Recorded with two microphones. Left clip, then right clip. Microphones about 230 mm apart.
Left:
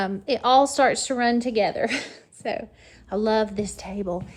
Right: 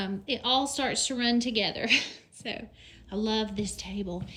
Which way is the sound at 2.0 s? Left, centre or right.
Right.